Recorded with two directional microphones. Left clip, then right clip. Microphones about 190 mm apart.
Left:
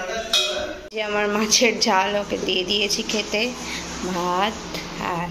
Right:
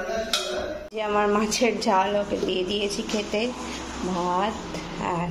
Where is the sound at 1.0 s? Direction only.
Centre (ahead or behind).